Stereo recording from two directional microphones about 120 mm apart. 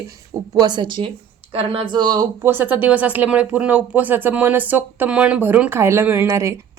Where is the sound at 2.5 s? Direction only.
15° right (ahead or behind).